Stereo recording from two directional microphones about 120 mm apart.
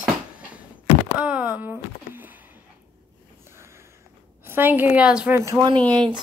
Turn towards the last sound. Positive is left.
turn(degrees=-35)  # may be behind; listen again after turning